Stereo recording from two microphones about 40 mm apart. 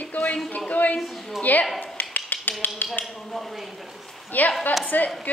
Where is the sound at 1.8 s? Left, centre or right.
Left.